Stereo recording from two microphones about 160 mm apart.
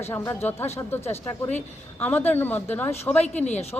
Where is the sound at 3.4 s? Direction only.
45° left (ahead or behind).